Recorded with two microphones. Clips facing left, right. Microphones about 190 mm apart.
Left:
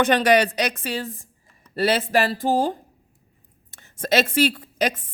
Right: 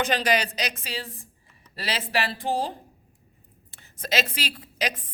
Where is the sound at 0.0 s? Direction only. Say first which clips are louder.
Left 7 dB; 55° left (ahead or behind).